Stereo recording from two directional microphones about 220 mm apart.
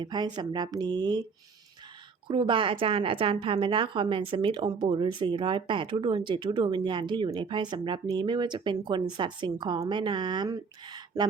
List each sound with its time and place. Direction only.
0.0 s a woman's voice: 20° right (ahead or behind)
2.2 s a woman's voice: 20° right (ahead or behind)